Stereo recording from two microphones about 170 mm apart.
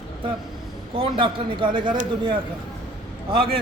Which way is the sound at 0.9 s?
30° right (ahead or behind).